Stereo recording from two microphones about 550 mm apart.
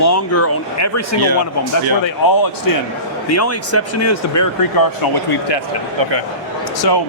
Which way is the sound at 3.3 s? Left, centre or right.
Left.